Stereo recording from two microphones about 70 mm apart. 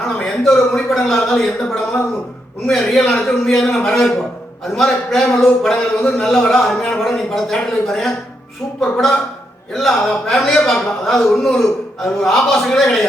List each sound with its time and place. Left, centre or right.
0.2 s a man's voice: centre
1.6 s a man's voice: centre
2.6 s a man's voice: centre